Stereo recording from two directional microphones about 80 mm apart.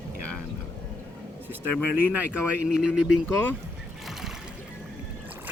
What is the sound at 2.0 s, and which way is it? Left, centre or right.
Speech, centre.